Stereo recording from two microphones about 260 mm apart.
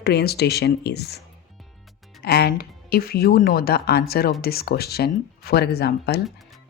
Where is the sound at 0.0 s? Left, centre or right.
Left.